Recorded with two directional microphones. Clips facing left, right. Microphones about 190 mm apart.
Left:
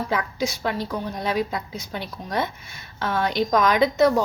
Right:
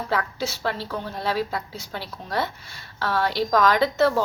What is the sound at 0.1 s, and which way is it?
A woman's voice, 15° left (ahead or behind).